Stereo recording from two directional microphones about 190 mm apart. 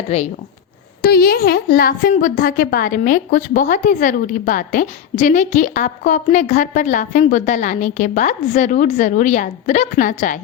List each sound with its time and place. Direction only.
0.1 s a woman's voice: 35° left (ahead or behind)
1.0 s a woman's voice: 50° left (ahead or behind)